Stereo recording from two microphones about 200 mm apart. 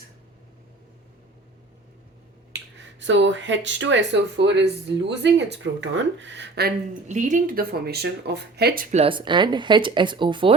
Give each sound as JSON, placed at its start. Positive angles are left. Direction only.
{"t": 2.5, "sound": "speech", "side_deg": -65}
{"t": 7.1, "sound": "speech", "side_deg": -40}
{"t": 9.0, "sound": "speech", "side_deg": -25}